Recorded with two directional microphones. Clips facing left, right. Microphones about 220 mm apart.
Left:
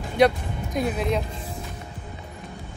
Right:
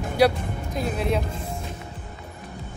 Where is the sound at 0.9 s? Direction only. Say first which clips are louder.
Right 2 dB; centre (ahead or behind).